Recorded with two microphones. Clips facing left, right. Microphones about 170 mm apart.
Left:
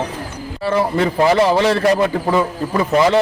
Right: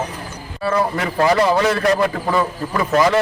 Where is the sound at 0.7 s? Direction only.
30° left (ahead or behind).